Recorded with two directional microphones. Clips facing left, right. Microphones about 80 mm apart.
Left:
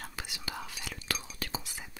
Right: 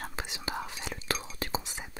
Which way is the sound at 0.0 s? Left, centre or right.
Right.